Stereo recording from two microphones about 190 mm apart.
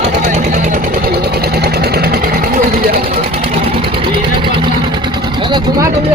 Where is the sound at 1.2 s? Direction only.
55° right (ahead or behind).